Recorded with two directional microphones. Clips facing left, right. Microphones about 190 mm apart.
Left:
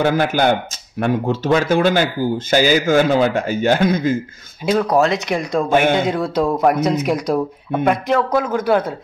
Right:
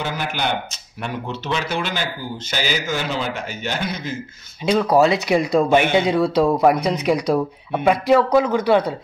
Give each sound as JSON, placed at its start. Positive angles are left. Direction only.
{"t": 0.0, "sound": "speech", "side_deg": 50}
{"t": 4.6, "sound": "speech", "side_deg": 0}